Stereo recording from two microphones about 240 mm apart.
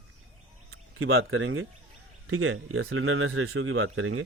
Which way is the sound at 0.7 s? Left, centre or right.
Right.